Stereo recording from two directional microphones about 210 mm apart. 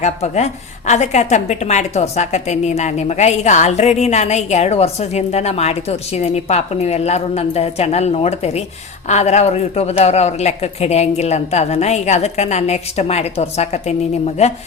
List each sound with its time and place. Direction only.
0.0 s a woman's voice: 30° left (ahead or behind)